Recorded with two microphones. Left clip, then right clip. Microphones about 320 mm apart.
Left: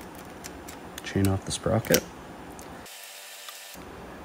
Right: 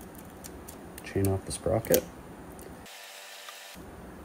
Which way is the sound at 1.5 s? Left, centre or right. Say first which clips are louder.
Left 2 dB; left.